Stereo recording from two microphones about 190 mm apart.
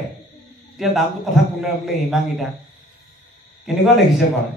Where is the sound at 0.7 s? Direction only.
Centre (ahead or behind).